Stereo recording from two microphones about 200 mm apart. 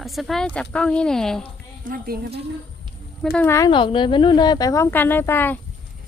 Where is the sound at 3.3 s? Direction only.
10° left (ahead or behind).